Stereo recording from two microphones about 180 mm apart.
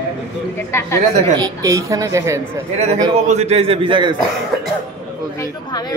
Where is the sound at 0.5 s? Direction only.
15° left (ahead or behind).